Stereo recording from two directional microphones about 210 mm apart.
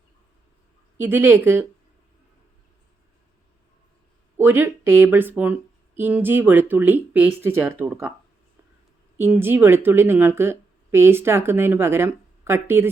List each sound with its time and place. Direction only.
0.9 s speech: 10° right (ahead or behind)
4.4 s speech: 10° right (ahead or behind)
9.1 s speech: 10° right (ahead or behind)